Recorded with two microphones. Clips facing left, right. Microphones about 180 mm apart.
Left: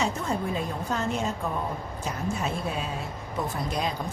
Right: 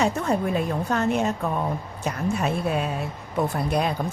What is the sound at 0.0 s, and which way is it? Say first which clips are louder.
Speech: right 5 dB; 65° right (ahead or behind).